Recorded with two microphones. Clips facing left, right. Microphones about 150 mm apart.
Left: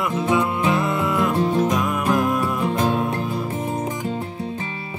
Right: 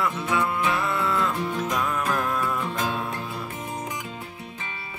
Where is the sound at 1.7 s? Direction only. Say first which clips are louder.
Left 5 dB; 15° left (ahead or behind).